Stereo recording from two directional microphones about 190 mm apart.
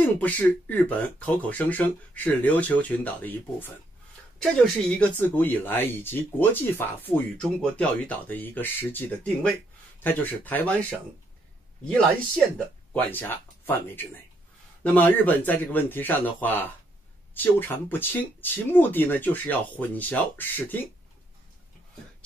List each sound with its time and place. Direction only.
0.0 s speech: 10° left (ahead or behind)
12.9 s speech: 10° left (ahead or behind)